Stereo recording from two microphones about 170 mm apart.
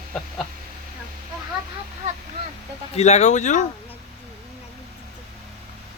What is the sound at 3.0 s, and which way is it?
Speech, 40° left (ahead or behind).